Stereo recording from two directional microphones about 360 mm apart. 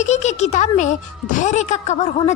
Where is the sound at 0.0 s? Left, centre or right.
Centre.